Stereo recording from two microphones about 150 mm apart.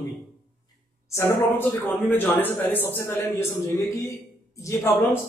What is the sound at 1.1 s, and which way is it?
A man's voice, 15° left (ahead or behind).